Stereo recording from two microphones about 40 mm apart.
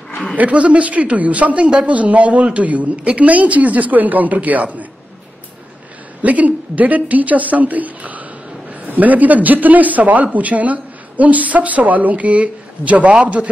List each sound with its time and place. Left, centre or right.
0.4 s speech: right
6.2 s speech: right